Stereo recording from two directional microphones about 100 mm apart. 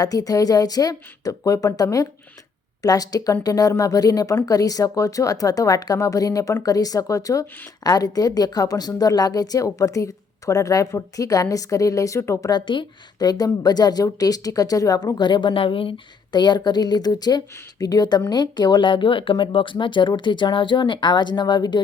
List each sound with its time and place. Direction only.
0.0 s speech: 40° left (ahead or behind)
12.5 s speech: 50° left (ahead or behind)